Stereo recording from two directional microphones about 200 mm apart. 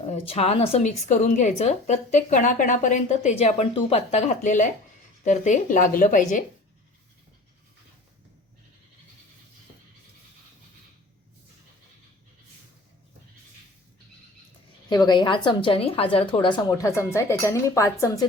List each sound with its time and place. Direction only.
0.1 s a woman's voice: 30° left (ahead or behind)
14.8 s a woman's voice: 20° left (ahead or behind)